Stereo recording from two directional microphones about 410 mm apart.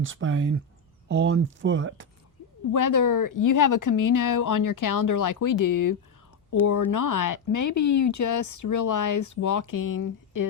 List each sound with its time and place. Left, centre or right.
0.0 s speech: right
2.7 s speech: left